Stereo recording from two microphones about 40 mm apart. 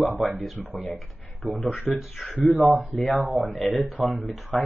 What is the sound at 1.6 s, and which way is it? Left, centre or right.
Speech, left.